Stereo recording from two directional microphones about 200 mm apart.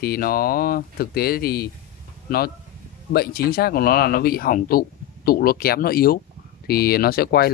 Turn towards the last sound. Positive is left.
turn(degrees=50)  # may be behind; listen again after turning